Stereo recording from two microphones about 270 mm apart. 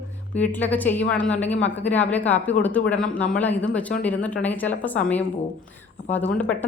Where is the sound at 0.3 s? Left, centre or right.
Centre.